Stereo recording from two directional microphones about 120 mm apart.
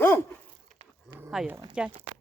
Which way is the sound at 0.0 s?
20° left (ahead or behind).